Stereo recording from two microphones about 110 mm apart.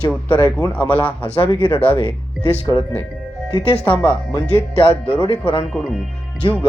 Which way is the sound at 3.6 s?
65° left (ahead or behind).